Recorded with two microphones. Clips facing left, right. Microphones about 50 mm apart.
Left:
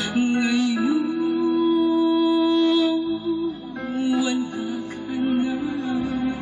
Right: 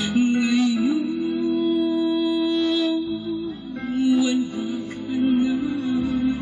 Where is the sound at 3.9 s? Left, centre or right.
Left.